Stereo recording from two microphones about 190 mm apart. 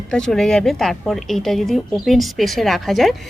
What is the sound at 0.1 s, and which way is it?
A woman's voice, 5° left (ahead or behind).